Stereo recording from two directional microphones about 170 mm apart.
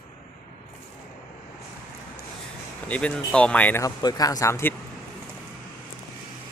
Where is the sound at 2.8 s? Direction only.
5° left (ahead or behind).